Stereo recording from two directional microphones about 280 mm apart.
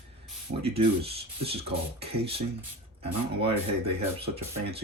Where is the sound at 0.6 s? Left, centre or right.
Right.